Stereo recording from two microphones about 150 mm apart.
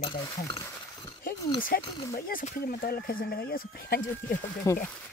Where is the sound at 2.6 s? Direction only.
85° left.